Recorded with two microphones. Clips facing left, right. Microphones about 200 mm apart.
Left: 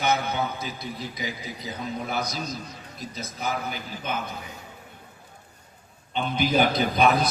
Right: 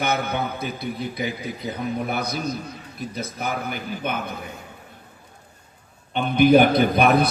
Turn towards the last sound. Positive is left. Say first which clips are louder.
# right 4 dB
turn(degrees=-60)  # may be behind; listen again after turning